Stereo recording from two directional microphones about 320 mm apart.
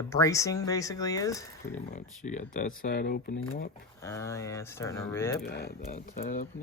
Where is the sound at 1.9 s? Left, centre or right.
Left.